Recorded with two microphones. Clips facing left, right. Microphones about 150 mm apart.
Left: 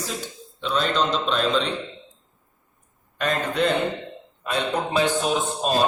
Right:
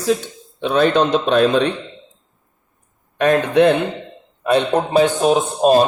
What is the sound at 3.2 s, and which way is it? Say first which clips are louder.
Speech: right 10 dB; 65° right (ahead or behind).